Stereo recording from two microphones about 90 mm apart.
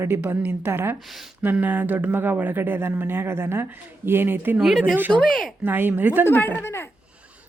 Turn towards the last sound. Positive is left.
turn(degrees=25)  # may be behind; listen again after turning